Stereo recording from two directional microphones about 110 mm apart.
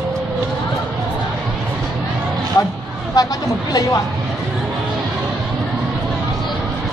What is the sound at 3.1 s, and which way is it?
Speech, 35° left (ahead or behind).